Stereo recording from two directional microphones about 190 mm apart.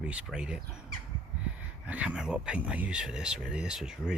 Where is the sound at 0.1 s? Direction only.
5° right (ahead or behind).